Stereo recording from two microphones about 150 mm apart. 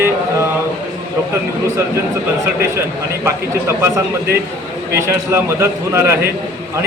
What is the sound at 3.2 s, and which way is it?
A man's voice, 20° right (ahead or behind).